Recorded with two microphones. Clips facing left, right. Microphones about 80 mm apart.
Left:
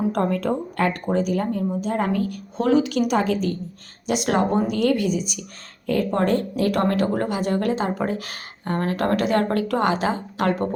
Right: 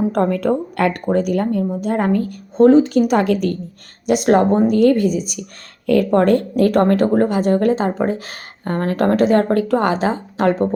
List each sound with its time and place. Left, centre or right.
0.3 s speech: right
1.8 s a woman's voice: right
3.1 s speech: right
4.0 s speech: right
5.8 s a woman's voice: right
6.1 s speech: right
6.7 s a woman's voice: right